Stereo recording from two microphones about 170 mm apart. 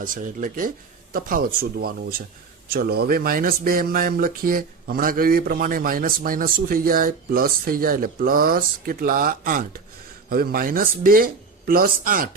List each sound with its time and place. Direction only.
0.0 s speech: 50° right (ahead or behind)